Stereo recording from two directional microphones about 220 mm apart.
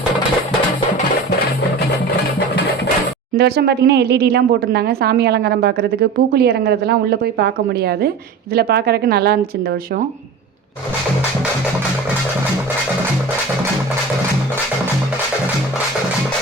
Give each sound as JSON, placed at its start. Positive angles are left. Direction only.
{"t": 3.3, "sound": "speech", "side_deg": -45}